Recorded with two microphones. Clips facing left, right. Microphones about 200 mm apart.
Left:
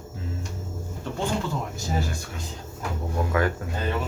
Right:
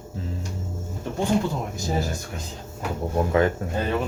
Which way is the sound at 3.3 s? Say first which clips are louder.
Right 4 dB; 25° right (ahead or behind).